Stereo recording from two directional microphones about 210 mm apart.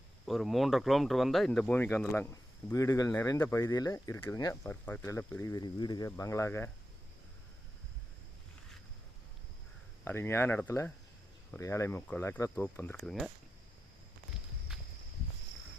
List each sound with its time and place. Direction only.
0.3 s speech: centre (ahead or behind)
10.0 s speech: 10° left (ahead or behind)